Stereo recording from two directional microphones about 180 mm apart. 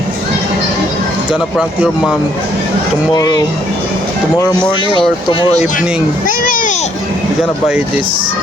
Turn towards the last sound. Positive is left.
turn(degrees=50)  # may be behind; listen again after turning